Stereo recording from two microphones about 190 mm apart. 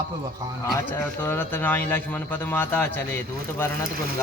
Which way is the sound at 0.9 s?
10° left (ahead or behind).